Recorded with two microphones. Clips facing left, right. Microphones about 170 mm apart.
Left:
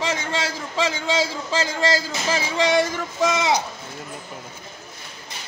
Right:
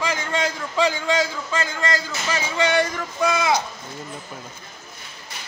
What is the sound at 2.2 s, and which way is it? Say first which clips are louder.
Speech: left 1 dB; 30° left (ahead or behind).